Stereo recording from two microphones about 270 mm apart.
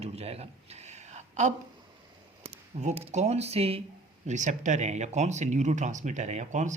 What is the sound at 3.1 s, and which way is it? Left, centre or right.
Speech, right.